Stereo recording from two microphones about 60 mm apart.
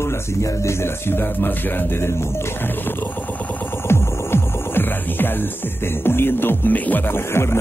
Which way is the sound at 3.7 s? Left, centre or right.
Left.